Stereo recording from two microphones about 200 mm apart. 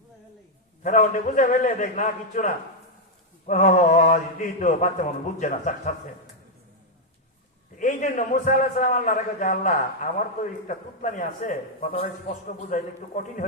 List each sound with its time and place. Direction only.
0.8 s a man's voice: 40° left (ahead or behind)
7.8 s a man's voice: 40° left (ahead or behind)